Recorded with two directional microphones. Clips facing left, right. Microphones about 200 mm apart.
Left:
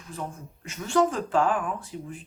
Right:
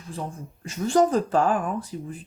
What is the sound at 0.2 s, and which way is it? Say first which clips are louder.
Speech: right 2 dB; 35° right (ahead or behind).